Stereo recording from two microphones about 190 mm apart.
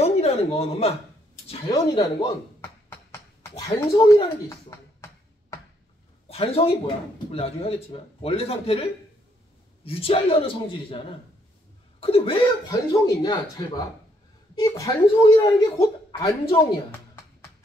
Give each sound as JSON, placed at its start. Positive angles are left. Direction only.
{"t": 0.0, "sound": "a sound", "side_deg": 35}
{"t": 1.7, "sound": "a sound", "side_deg": 20}
{"t": 3.5, "sound": "speech", "side_deg": 25}
{"t": 6.2, "sound": "speech", "side_deg": 30}
{"t": 9.8, "sound": "speech", "side_deg": 30}
{"t": 12.0, "sound": "speech", "side_deg": 30}